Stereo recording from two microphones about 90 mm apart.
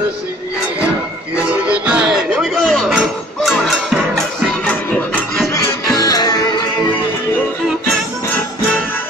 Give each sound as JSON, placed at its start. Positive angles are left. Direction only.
{"t": 1.3, "sound": "music", "side_deg": -15}
{"t": 2.6, "sound": "a sound", "side_deg": 5}
{"t": 3.4, "sound": "music", "side_deg": 0}
{"t": 5.5, "sound": "music", "side_deg": 45}